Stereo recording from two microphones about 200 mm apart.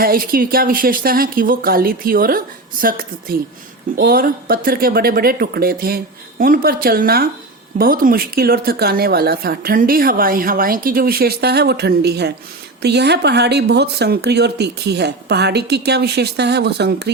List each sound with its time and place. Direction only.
0.0 s a woman's voice: 45° right (ahead or behind)